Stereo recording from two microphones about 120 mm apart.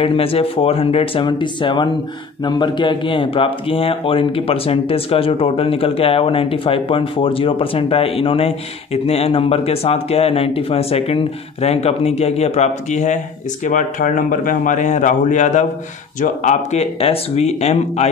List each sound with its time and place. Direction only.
0.0 s a man's voice: 50° left (ahead or behind); by 16.8 s 90° left
17.0 s speech: 55° left (ahead or behind)